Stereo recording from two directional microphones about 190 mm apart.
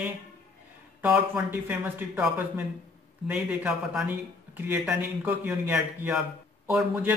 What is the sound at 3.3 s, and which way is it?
Speech, 5° right (ahead or behind).